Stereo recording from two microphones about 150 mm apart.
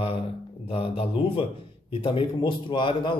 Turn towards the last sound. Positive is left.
turn(degrees=30)  # may be behind; listen again after turning